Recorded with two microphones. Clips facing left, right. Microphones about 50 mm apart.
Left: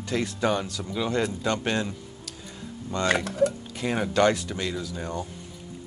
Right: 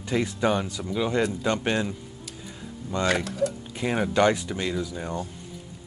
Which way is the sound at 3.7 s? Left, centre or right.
Centre.